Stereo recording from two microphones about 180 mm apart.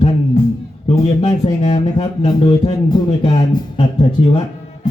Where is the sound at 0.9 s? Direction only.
35° left (ahead or behind).